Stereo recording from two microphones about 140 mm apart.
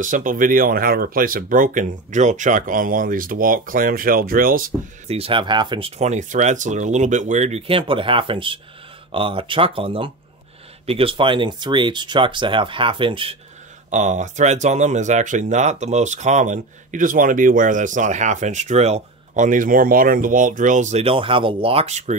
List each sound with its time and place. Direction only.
0.0 s speech: 75° right (ahead or behind); by 4.7 s 90° right
5.0 s speech: 45° right (ahead or behind)
13.8 s speech: 60° right (ahead or behind)